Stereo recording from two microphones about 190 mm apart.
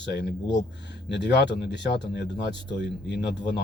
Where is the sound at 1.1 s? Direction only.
65° left (ahead or behind).